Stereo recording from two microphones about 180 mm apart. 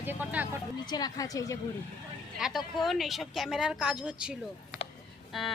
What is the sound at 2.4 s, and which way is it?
Speech, 5° right (ahead or behind).